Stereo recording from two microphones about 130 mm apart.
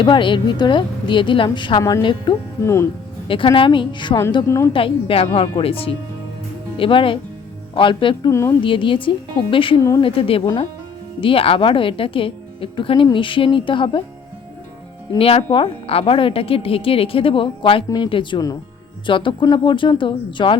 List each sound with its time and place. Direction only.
0.0 s speech: 40° left (ahead or behind)
2.6 s a woman's voice: 20° left (ahead or behind)
3.2 s speech: 40° left (ahead or behind)
4.4 s a woman's voice: 20° left (ahead or behind)
4.7 s speech: 45° left (ahead or behind)
8.3 s a woman's voice: 20° left (ahead or behind)
8.6 s speech: 40° left (ahead or behind)
15.2 s speech: 45° left (ahead or behind)